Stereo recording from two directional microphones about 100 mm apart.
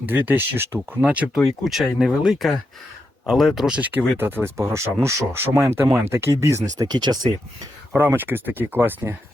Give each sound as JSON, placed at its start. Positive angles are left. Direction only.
{"t": 0.0, "sound": "speech", "side_deg": -20}
{"t": 1.6, "sound": "speech", "side_deg": -5}
{"t": 3.8, "sound": "speech", "side_deg": -15}
{"t": 7.9, "sound": "speech", "side_deg": -20}